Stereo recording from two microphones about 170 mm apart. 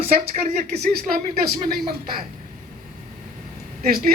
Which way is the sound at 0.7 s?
65° right (ahead or behind).